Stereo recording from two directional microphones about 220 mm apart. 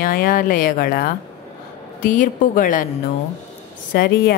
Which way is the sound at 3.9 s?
40° left (ahead or behind).